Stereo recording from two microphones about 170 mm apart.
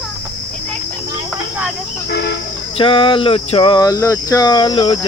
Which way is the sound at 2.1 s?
85° left.